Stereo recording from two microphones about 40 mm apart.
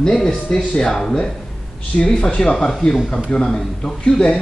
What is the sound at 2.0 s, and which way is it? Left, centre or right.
Speech, left.